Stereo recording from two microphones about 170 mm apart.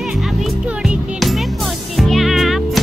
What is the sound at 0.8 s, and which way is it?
Music, centre (ahead or behind).